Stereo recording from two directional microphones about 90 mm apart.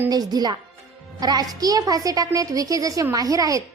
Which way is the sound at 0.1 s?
45° right (ahead or behind).